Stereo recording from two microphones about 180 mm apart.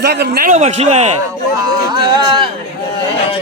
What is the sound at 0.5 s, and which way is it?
Speech, 40° right (ahead or behind).